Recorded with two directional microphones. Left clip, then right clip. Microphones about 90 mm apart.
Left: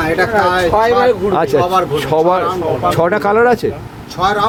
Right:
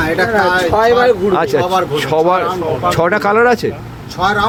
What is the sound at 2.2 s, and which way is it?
Speech, 20° left (ahead or behind).